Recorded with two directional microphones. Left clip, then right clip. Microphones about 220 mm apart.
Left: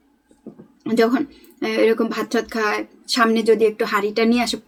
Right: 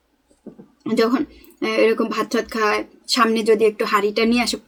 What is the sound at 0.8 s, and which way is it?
Speech, centre (ahead or behind).